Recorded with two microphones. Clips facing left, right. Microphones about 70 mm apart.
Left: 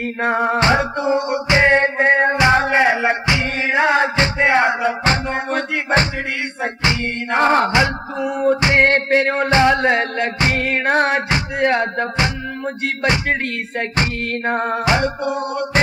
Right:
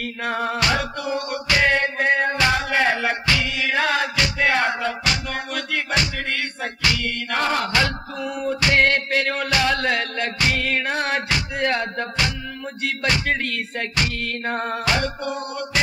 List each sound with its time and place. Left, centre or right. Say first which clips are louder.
0.2 s music: left 7 dB; left
5.0 s music: left 6 dB; left